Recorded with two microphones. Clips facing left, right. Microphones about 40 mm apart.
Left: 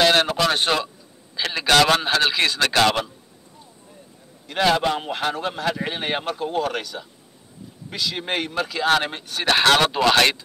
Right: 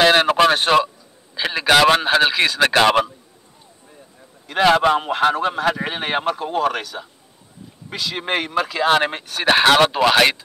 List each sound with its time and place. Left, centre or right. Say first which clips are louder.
0.0 s a sound: right 3 dB; centre
0.7 s speech: right 7 dB; centre
2.6 s speech: right 5 dB; right
4.8 s speech: right 7 dB; centre
8.8 s speech: right 3 dB; right
9.1 s speech: right 4 dB; centre